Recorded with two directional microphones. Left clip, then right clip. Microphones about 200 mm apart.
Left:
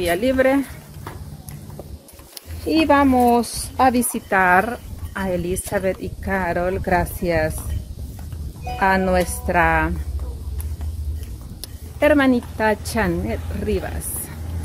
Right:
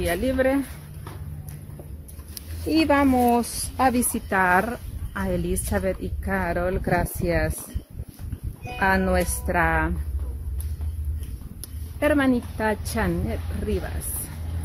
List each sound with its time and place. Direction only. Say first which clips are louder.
0.0 s speech: left 5 dB; centre (ahead or behind)
2.6 s a woman's voice: left 4 dB; 15° right (ahead or behind)
8.7 s a woman's voice: left 4 dB; 15° right (ahead or behind)
11.6 s speech: left 6 dB; 10° right (ahead or behind)